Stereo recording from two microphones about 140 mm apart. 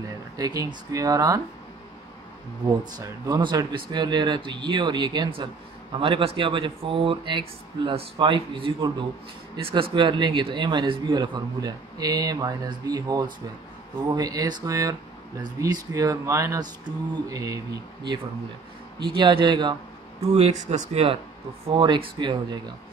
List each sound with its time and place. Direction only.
0.4 s speech: 25° right (ahead or behind)
2.8 s speech: 30° right (ahead or behind)
18.9 s speech: 35° right (ahead or behind)
20.2 s speech: 45° right (ahead or behind)
21.6 s speech: 35° right (ahead or behind)